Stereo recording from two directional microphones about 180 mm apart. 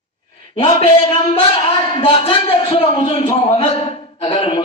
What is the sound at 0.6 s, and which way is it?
A man's voice, 30° left (ahead or behind).